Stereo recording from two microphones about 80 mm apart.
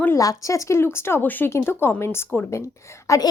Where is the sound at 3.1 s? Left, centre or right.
Left.